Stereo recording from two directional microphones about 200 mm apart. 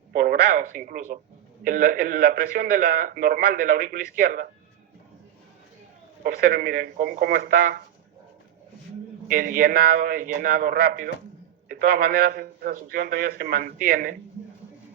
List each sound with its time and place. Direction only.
0.1 s a man's voice: 50° right (ahead or behind)
6.2 s a man's voice: 50° right (ahead or behind)
9.3 s a man's voice: 45° right (ahead or behind)